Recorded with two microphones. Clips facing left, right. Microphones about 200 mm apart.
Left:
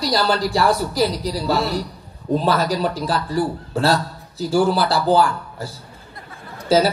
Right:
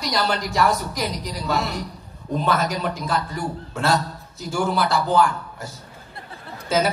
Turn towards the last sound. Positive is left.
turn(degrees=35)  # may be behind; listen again after turning